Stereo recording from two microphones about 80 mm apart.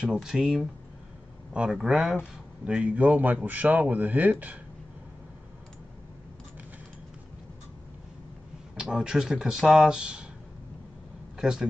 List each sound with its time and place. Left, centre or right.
0.0 s speech: centre
8.7 s speech: centre
11.3 s speech: centre